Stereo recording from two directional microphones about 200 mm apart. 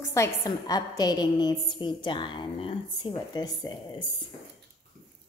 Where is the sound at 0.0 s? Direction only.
15° left (ahead or behind).